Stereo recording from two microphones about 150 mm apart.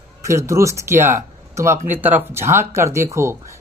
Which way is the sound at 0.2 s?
20° right (ahead or behind).